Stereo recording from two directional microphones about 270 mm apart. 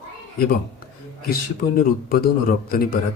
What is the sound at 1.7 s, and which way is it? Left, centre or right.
Speech, left.